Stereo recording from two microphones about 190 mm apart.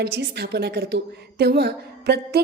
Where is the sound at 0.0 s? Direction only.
60° right (ahead or behind).